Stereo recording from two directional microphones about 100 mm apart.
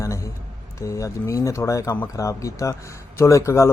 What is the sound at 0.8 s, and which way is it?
Speech, 30° left (ahead or behind).